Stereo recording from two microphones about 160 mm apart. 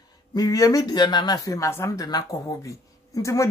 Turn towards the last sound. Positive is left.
turn(degrees=20)  # may be behind; listen again after turning